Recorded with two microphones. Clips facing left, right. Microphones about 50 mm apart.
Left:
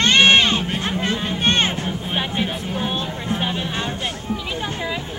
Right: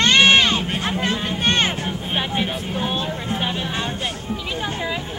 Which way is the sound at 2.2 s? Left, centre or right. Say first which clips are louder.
Right 1 dB; centre.